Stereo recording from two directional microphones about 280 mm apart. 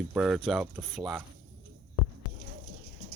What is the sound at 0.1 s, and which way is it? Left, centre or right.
Speech, centre.